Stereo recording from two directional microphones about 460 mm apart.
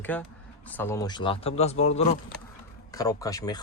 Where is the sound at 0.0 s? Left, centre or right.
Centre.